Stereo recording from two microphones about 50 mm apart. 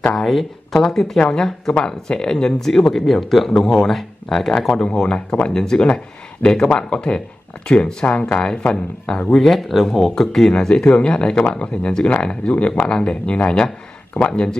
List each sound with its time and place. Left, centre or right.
0.1 s speech: centre
9.3 s speech: centre